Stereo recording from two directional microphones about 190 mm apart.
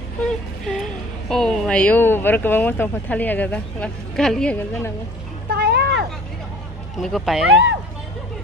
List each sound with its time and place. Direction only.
0.2 s a sound: 5° left (ahead or behind)
1.3 s speech: 5° left (ahead or behind)
5.5 s vehicle: 60° right (ahead or behind)
7.0 s speech: centre (ahead or behind)